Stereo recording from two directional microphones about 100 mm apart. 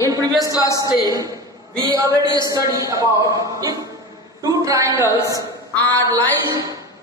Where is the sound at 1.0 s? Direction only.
35° right (ahead or behind).